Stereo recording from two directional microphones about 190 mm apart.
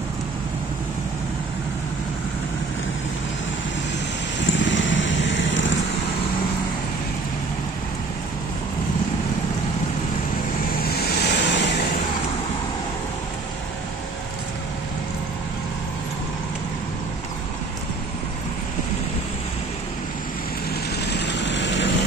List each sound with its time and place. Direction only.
4.4 s vehicle: 75° left (ahead or behind)
10.8 s vehicle: 55° left (ahead or behind)
21.0 s vehicle: 65° left (ahead or behind)